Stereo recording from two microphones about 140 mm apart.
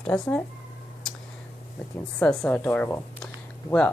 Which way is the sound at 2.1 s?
5° left (ahead or behind).